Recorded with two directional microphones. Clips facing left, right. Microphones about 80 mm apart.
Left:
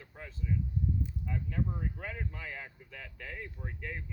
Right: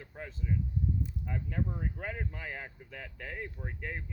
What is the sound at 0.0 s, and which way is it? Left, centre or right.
Speech, right.